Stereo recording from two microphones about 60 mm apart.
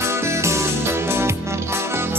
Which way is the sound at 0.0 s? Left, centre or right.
Right.